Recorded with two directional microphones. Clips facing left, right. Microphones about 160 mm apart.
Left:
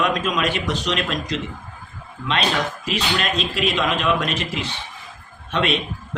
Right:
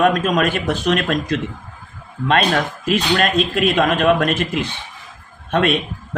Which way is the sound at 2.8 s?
50° right (ahead or behind).